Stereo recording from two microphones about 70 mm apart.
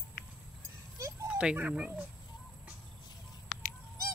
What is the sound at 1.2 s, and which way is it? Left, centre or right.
Speech, centre.